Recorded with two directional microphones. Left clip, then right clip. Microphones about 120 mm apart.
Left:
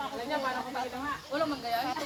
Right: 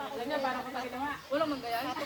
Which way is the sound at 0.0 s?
20° right (ahead or behind).